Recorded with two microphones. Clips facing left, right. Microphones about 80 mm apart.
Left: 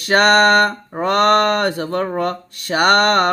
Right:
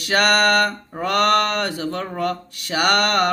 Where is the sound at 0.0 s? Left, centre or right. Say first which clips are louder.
Left 5 dB; left.